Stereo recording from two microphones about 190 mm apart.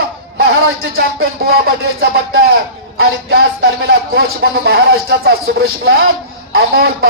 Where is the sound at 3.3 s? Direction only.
55° right (ahead or behind).